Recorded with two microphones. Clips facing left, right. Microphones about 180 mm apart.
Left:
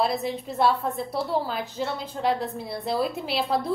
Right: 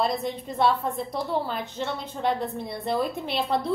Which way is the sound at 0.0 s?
5° left (ahead or behind).